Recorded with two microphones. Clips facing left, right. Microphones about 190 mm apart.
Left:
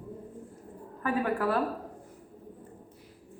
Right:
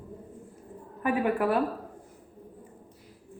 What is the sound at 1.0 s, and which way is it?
Speech, 15° right (ahead or behind).